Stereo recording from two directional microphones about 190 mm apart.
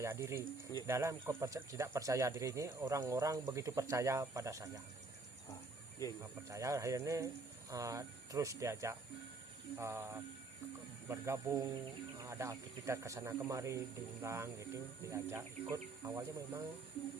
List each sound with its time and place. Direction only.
0.0 s speech: 15° right (ahead or behind)
6.0 s speech: 15° left (ahead or behind)
6.5 s speech: 15° right (ahead or behind)